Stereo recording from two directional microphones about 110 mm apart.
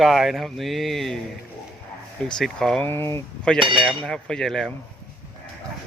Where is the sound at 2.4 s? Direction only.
5° left (ahead or behind).